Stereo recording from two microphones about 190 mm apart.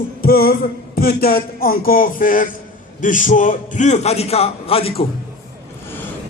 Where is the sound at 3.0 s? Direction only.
45° left (ahead or behind).